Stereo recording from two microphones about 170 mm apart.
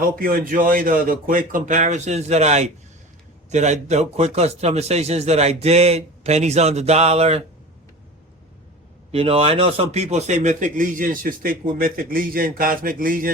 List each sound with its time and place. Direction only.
0.0 s a man's voice: 55° right (ahead or behind); by 7.4 s 40° right (ahead or behind)
9.1 s a man's voice: 35° right (ahead or behind); by 13.3 s 55° right (ahead or behind)